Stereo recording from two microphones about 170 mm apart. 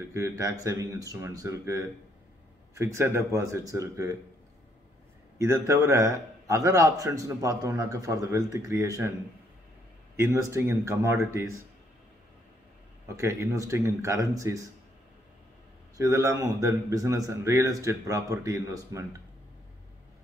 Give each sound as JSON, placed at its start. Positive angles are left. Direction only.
{"t": 0.1, "sound": "a man's voice", "side_deg": -15}
{"t": 5.4, "sound": "a man's voice", "side_deg": -15}
{"t": 10.1, "sound": "speech", "side_deg": -15}
{"t": 13.1, "sound": "speech", "side_deg": -15}
{"t": 16.0, "sound": "a man's voice", "side_deg": -20}